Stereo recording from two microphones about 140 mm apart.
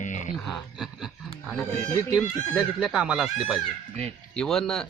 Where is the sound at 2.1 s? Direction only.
5° right (ahead or behind).